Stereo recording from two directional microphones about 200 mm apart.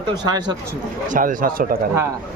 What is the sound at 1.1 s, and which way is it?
Speech, 45° right (ahead or behind).